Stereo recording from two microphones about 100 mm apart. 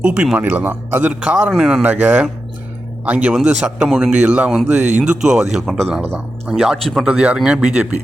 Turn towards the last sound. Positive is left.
turn(degrees=-10)  # may be behind; listen again after turning